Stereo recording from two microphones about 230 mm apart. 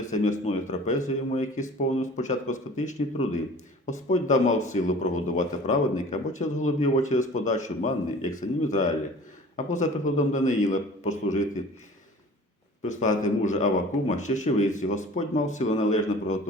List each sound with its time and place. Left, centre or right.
0.9 s a man's voice: left
12.8 s a man's voice: left